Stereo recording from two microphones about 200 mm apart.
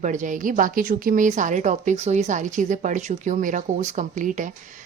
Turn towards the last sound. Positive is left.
turn(degrees=-40)  # may be behind; listen again after turning